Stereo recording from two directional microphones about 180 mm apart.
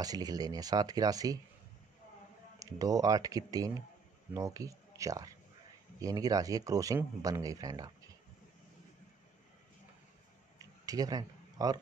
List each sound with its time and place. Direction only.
0.0 s speech: 20° right (ahead or behind)
2.6 s speech: 20° right (ahead or behind)
10.9 s speech: 20° right (ahead or behind)